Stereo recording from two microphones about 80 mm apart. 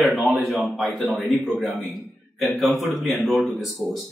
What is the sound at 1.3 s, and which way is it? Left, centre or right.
Speech, centre.